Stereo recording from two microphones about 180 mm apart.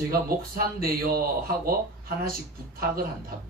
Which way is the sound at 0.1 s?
55° right (ahead or behind).